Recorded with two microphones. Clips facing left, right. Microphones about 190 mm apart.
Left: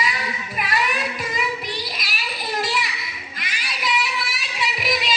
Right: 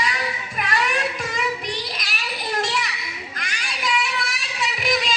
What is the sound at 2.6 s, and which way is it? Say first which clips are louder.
Children playing: even; 5° left (ahead or behind).